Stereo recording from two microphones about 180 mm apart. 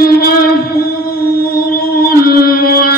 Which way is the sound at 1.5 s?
60° left (ahead or behind).